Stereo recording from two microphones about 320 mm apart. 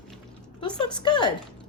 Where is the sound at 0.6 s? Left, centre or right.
Centre.